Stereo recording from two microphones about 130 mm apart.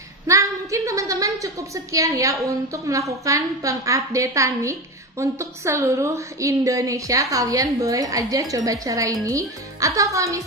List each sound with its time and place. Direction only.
0.3 s a woman's voice: 25° right (ahead or behind)